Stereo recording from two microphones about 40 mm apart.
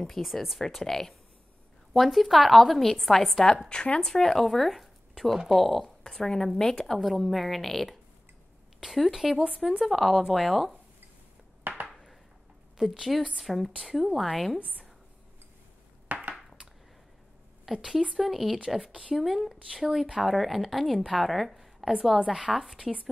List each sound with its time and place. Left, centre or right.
0.0 s a woman's voice: centre
3.6 s speech: left
4.0 s a woman's voice: centre
6.0 s a woman's voice: centre
11.9 s a sound: centre
12.9 s a woman's voice: centre
16.1 s a sound: right
17.7 s a woman's voice: centre
18.9 s speech: right
19.1 s a woman's voice: centre
22.8 s speech: right